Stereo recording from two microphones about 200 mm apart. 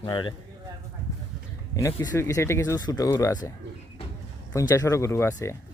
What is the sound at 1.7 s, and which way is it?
Speech, 15° left (ahead or behind).